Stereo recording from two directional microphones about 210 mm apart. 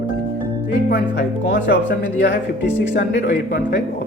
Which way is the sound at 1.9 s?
50° left (ahead or behind).